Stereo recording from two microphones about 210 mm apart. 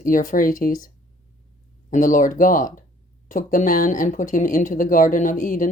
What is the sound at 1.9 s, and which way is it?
Speech, 40° left (ahead or behind).